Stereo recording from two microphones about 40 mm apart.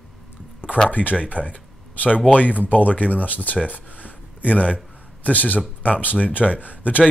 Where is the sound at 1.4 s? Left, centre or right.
Left.